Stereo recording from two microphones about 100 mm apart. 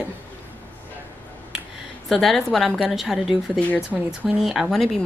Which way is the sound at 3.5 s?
15° left (ahead or behind).